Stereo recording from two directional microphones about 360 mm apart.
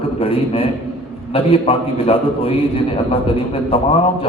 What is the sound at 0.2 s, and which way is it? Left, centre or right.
A man's voice, centre.